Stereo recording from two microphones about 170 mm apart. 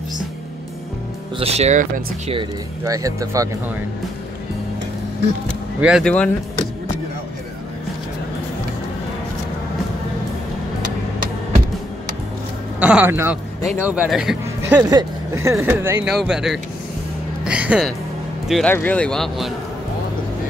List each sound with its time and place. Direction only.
1.4 s speech: 40° right (ahead or behind)
2.3 s speech: 20° right (ahead or behind)
5.8 s speech: 5° right (ahead or behind)
6.0 s speech: 10° left (ahead or behind)
12.8 s speech: 10° right (ahead or behind)
14.8 s speech: 25° right (ahead or behind); by 17.9 s 5° right (ahead or behind)
18.5 s speech: 10° left (ahead or behind)